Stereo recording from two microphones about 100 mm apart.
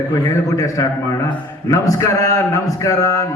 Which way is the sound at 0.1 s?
35° left (ahead or behind).